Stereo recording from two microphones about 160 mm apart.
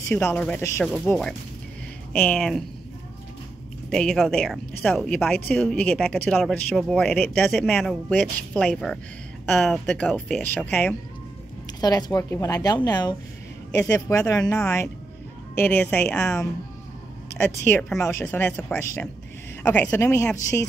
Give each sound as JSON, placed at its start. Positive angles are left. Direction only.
{"t": 0.1, "sound": "speech", "side_deg": 10}
{"t": 3.9, "sound": "speech", "side_deg": 5}
{"t": 8.1, "sound": "speech", "side_deg": 10}
{"t": 8.6, "sound": "speech", "side_deg": 0}
{"t": 11.6, "sound": "speech", "side_deg": 25}
{"t": 17.6, "sound": "speech", "side_deg": 10}